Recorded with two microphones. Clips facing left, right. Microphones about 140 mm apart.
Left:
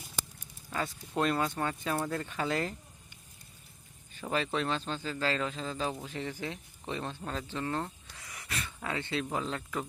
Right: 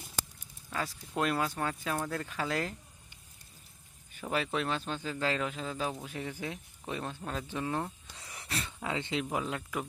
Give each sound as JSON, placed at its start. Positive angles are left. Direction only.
{"t": 0.7, "sound": "speech", "side_deg": 0}
{"t": 4.1, "sound": "a man's voice", "side_deg": -5}
{"t": 8.2, "sound": "a sound", "side_deg": -30}
{"t": 8.8, "sound": "a man's voice", "side_deg": -15}